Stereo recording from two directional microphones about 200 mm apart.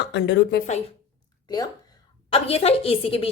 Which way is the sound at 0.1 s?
60° left (ahead or behind).